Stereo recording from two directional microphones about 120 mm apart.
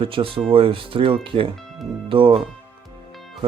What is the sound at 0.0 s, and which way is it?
Speech, 50° right (ahead or behind).